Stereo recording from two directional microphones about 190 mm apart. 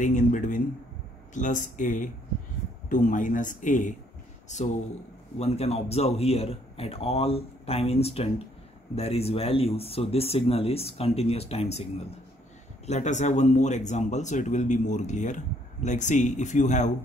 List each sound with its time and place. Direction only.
0.0 s speech: 40° left (ahead or behind)
12.8 s speech: 35° left (ahead or behind)